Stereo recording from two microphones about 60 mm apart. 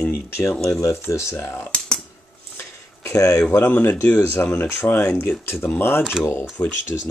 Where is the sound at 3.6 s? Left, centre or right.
Left.